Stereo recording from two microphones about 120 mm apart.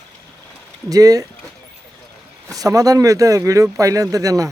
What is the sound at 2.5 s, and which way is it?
Speech, 30° right (ahead or behind).